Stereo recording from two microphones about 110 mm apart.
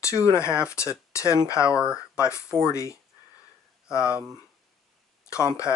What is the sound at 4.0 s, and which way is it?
Speech, 10° right (ahead or behind).